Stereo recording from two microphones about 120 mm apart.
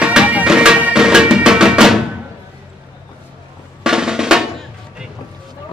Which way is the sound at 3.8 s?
5° right (ahead or behind).